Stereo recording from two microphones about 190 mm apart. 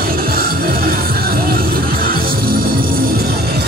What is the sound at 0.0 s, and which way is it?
Music, 50° right (ahead or behind).